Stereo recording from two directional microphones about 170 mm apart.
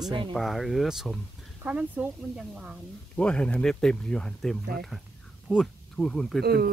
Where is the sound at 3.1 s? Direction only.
5° left (ahead or behind).